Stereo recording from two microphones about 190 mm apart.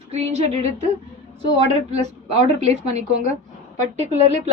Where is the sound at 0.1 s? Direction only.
35° right (ahead or behind).